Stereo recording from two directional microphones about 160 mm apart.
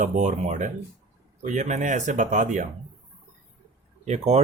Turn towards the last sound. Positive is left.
turn(degrees=-40)  # may be behind; listen again after turning